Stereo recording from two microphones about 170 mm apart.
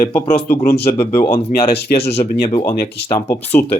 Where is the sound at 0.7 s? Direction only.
35° left (ahead or behind).